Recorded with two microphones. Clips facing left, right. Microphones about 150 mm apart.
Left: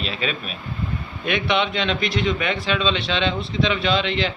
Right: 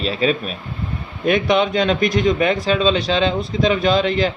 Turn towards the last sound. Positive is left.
turn(degrees=-40)  # may be behind; listen again after turning